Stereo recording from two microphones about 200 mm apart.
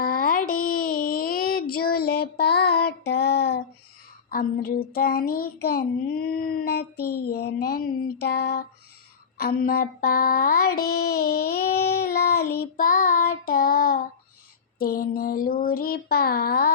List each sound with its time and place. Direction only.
0.0 s child singing: 45° left (ahead or behind)